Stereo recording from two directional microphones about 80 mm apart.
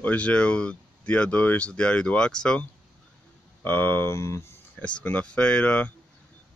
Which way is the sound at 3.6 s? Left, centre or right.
Left.